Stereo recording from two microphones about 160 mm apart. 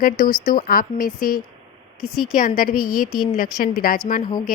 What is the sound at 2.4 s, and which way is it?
A woman's voice, 65° left (ahead or behind).